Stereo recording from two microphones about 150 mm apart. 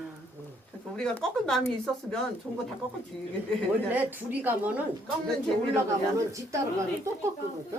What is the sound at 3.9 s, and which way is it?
Speech, 10° right (ahead or behind).